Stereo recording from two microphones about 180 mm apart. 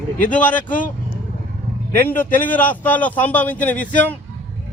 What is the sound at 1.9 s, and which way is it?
A man's voice, 10° left (ahead or behind).